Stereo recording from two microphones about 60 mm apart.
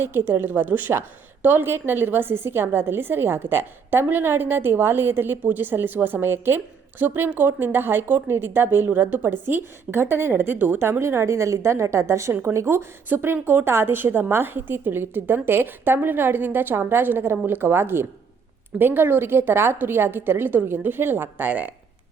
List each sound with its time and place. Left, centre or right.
0.0 s a woman's voice: right
12.3 s a woman's voice: right